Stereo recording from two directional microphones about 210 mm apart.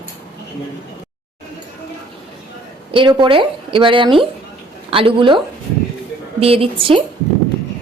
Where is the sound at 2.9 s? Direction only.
25° right (ahead or behind).